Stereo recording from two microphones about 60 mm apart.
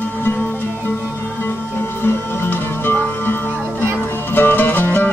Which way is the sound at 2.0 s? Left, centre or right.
Left.